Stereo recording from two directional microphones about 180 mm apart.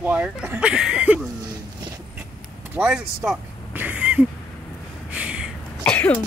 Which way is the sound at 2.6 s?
10° right (ahead or behind).